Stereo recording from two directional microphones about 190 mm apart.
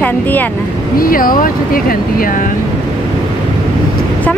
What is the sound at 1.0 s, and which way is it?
Speech, 50° left (ahead or behind).